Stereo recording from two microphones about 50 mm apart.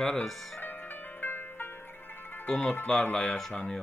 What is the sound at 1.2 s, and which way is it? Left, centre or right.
Music, left.